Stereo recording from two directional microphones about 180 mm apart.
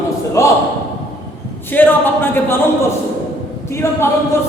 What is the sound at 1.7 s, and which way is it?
Speech, 10° left (ahead or behind).